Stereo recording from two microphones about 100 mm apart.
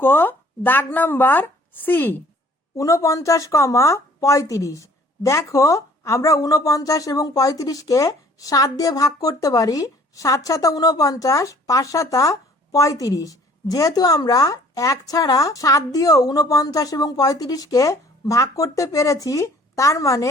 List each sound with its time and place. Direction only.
0.0 s speech: 20° left (ahead or behind)
2.7 s speech: 30° left (ahead or behind)